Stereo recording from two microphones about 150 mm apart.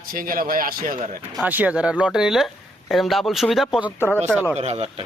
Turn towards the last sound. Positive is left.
turn(degrees=-45)  # may be behind; listen again after turning